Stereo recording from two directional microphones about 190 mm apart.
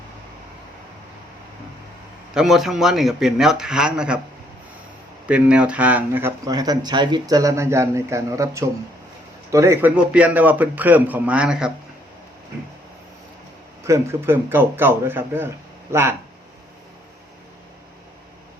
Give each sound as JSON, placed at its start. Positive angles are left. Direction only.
{"t": 2.3, "sound": "a man's voice", "side_deg": 0}
{"t": 5.3, "sound": "speech", "side_deg": -5}
{"t": 13.8, "sound": "speech", "side_deg": -15}